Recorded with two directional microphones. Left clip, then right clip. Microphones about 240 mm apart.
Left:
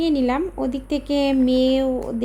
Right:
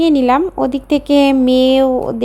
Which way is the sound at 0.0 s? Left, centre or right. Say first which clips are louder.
Right 9 dB; right.